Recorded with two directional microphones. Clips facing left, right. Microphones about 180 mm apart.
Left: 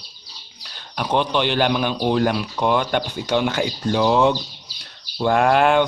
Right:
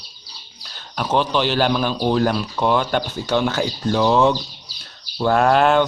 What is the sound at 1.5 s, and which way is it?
Speech, 40° right (ahead or behind).